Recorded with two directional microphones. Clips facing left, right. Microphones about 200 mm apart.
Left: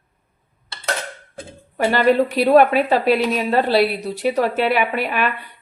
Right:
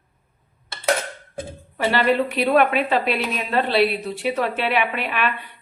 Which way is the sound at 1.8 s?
45° left (ahead or behind).